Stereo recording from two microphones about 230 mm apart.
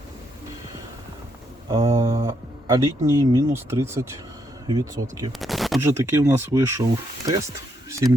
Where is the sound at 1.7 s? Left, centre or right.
Centre.